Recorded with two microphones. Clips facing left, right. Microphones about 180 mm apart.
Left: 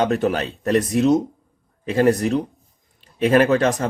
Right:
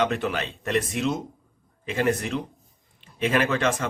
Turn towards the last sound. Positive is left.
turn(degrees=40)  # may be behind; listen again after turning